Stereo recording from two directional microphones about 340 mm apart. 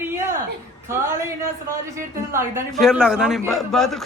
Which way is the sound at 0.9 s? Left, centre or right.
Centre.